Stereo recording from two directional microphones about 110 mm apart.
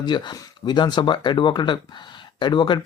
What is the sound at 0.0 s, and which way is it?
Speech, 40° left (ahead or behind).